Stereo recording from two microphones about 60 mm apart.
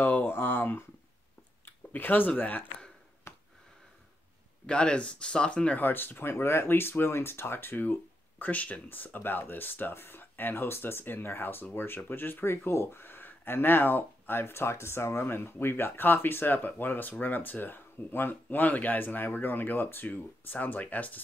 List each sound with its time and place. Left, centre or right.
0.0 s speech: left
1.9 s speech: left
3.3 s a sound: left
4.6 s speech: centre
5.8 s speech: left